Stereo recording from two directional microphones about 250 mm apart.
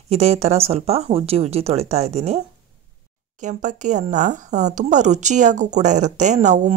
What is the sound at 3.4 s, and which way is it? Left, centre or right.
A woman's voice, right.